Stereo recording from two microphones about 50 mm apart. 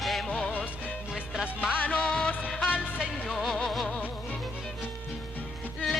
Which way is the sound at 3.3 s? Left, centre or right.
Centre.